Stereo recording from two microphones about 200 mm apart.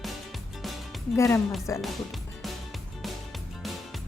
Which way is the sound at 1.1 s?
15° left (ahead or behind).